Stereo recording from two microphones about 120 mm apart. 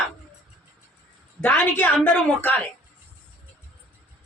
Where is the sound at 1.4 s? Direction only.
15° left (ahead or behind).